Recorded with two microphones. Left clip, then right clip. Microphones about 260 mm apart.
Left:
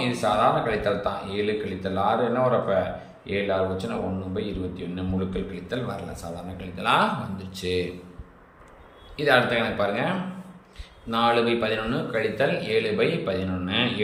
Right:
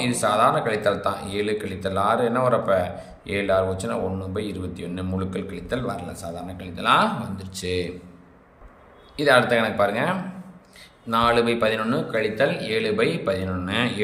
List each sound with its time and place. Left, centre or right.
0.0 s a man's voice: centre
9.1 s a man's voice: centre